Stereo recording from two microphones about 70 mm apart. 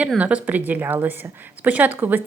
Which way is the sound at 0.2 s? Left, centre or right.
Centre.